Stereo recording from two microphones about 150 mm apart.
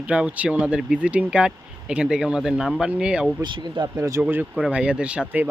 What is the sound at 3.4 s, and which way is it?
Speech, 30° right (ahead or behind).